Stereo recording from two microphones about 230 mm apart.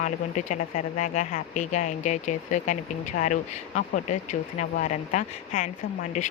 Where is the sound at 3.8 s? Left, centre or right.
Left.